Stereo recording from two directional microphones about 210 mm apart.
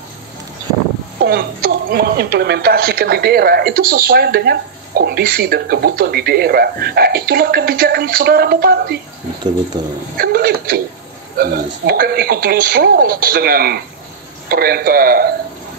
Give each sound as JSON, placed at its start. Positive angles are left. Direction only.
{"t": 1.2, "sound": "a woman's voice", "side_deg": -45}
{"t": 9.8, "sound": "speech", "side_deg": -20}
{"t": 10.1, "sound": "a woman's voice", "side_deg": -45}